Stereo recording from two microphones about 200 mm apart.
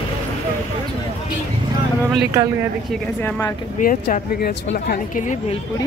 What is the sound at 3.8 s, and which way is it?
A woman's voice, 45° left (ahead or behind).